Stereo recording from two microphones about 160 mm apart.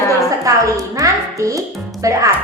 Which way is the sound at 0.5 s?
20° right (ahead or behind).